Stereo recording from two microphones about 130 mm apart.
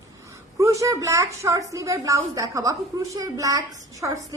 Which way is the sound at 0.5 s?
25° right (ahead or behind).